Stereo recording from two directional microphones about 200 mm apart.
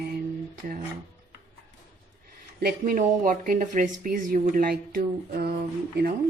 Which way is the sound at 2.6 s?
45° right (ahead or behind).